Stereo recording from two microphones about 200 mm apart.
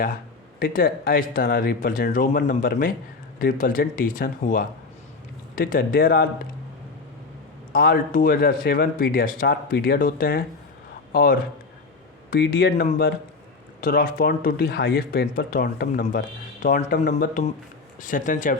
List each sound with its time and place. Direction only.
0.6 s speech: 45° left (ahead or behind)
7.7 s a man's voice: 50° left (ahead or behind)